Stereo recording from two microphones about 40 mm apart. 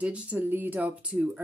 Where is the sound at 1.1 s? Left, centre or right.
Right.